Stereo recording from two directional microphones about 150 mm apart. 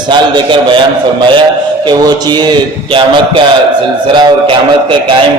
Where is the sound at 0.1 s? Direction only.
30° right (ahead or behind).